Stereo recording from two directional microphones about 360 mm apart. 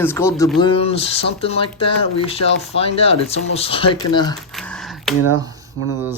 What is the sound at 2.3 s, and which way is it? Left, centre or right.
Speech, centre.